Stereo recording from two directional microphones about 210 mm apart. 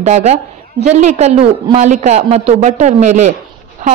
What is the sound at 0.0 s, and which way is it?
A woman's voice, 30° right (ahead or behind).